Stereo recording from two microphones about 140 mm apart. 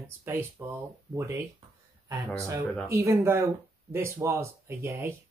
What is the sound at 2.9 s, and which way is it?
Speech, 20° right (ahead or behind).